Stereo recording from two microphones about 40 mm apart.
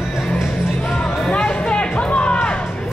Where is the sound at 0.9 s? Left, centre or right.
Left.